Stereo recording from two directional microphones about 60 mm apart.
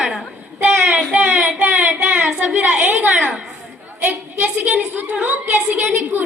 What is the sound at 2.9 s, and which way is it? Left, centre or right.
Speech, right.